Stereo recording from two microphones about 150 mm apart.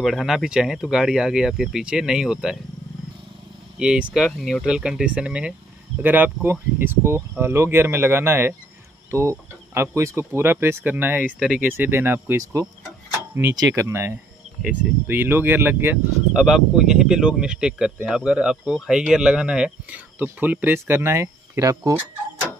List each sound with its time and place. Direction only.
0.0 s speech: centre (ahead or behind)
3.8 s speech: 5° right (ahead or behind); by 21.9 s 20° right (ahead or behind)